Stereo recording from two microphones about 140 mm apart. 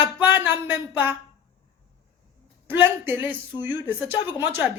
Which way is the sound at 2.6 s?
15° right (ahead or behind).